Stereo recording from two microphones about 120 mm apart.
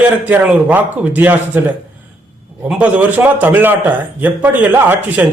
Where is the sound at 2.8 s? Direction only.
15° right (ahead or behind).